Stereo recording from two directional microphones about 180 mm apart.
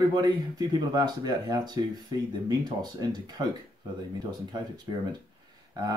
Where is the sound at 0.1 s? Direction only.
20° right (ahead or behind).